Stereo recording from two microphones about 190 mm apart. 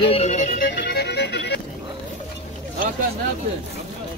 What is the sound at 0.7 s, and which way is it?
Music, 60° left (ahead or behind).